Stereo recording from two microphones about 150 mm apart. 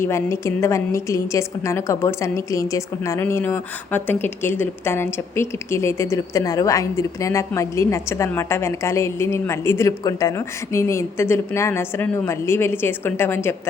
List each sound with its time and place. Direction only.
0.0 s a woman's voice: 20° left (ahead or behind)